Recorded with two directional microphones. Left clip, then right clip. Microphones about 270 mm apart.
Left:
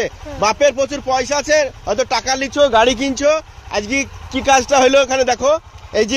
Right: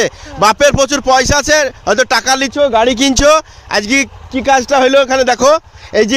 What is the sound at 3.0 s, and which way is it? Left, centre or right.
A man's voice, right.